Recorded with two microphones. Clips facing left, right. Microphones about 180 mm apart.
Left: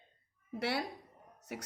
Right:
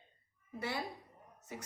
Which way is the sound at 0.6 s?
75° left (ahead or behind).